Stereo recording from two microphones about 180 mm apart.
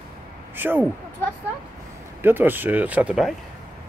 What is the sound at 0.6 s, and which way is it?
Speech, 10° right (ahead or behind).